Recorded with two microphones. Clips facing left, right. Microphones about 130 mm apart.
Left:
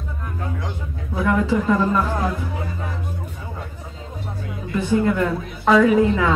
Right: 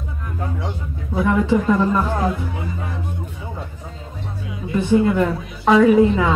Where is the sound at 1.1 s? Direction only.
20° right (ahead or behind).